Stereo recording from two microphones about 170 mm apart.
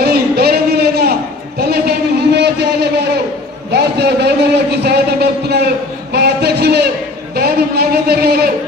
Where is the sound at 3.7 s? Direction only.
75° right (ahead or behind).